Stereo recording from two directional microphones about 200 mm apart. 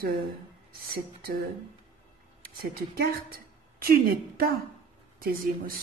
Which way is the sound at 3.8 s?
45° right (ahead or behind).